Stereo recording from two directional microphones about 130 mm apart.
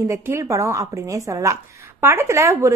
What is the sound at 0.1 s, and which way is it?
Speech, 25° right (ahead or behind).